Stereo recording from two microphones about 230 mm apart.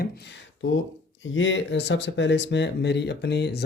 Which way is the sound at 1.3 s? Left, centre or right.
Left.